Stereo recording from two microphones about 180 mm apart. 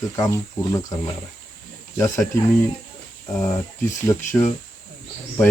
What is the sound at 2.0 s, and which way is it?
Speech, 15° left (ahead or behind).